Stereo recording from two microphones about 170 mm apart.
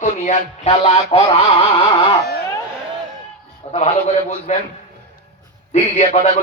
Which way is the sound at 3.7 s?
35° left (ahead or behind).